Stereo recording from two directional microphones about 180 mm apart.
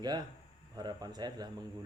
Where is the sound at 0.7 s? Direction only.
20° right (ahead or behind).